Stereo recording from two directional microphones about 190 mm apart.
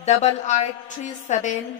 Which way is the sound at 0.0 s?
35° left (ahead or behind).